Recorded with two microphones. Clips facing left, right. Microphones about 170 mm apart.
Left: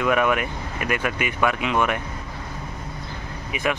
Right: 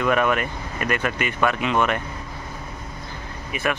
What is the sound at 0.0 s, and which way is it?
Speech, 10° left (ahead or behind).